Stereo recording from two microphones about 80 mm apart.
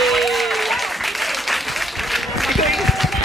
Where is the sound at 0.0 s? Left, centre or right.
Centre.